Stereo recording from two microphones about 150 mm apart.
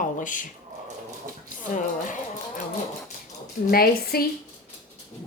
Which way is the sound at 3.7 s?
85° left.